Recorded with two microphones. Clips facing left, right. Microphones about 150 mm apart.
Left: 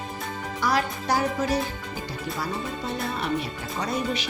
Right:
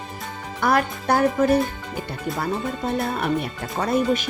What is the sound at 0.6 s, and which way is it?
Speech, 55° right (ahead or behind).